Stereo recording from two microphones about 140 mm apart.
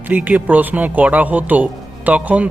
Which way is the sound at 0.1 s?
10° right (ahead or behind).